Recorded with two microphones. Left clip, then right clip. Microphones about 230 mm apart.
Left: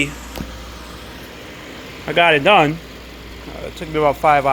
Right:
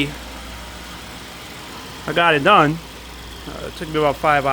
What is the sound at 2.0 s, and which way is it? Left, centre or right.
Speech, centre.